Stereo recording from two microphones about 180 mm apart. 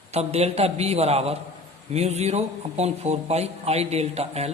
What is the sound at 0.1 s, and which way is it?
A man's voice, 35° right (ahead or behind).